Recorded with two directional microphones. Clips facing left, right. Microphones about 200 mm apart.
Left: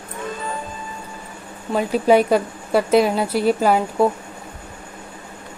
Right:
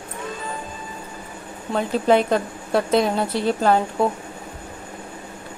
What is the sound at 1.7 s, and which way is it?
Speech, 10° left (ahead or behind).